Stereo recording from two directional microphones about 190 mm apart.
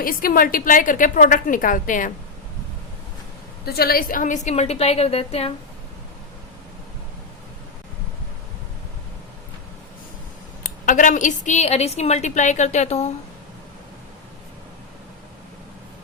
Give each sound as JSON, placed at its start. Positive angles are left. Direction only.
{"t": 0.0, "sound": "a woman's voice", "side_deg": 50}
{"t": 3.7, "sound": "a woman's voice", "side_deg": 55}
{"t": 10.6, "sound": "a woman's voice", "side_deg": 45}